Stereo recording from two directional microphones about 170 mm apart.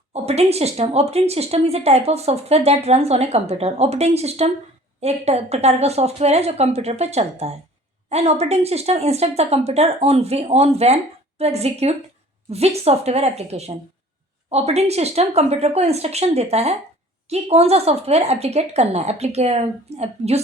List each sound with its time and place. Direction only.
0.1 s speech: 40° right (ahead or behind)